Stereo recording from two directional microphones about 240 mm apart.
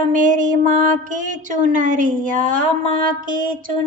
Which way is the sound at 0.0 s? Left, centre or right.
Right.